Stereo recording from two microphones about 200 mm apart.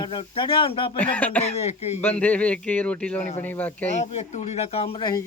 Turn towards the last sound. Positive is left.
turn(degrees=30)  # may be behind; listen again after turning